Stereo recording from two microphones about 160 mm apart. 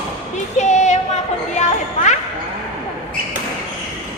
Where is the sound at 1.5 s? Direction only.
45° left (ahead or behind).